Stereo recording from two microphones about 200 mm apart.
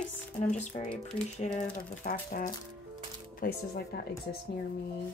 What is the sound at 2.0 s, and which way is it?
Speech, 40° left (ahead or behind).